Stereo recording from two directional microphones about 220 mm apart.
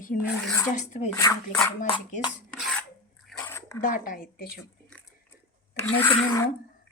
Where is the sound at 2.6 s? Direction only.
Centre (ahead or behind).